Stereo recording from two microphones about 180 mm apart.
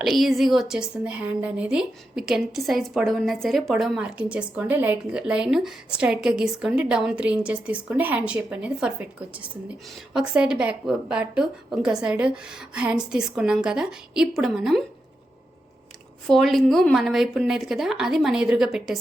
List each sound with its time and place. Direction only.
0.0 s a woman's voice: centre (ahead or behind)
16.2 s a woman's voice: centre (ahead or behind)